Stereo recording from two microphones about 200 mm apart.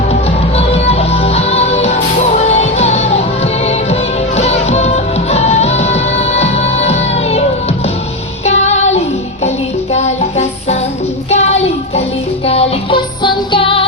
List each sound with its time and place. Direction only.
0.1 s music: 30° left (ahead or behind)
8.4 s music: 35° left (ahead or behind)